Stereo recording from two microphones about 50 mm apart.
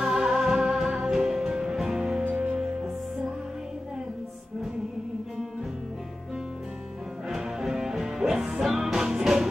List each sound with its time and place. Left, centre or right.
0.0 s music: centre
2.2 s music: right
2.5 s music: centre
7.2 s music: centre